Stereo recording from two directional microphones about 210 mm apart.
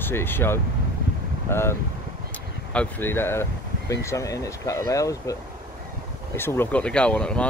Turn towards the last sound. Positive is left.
turn(degrees=5)  # may be behind; listen again after turning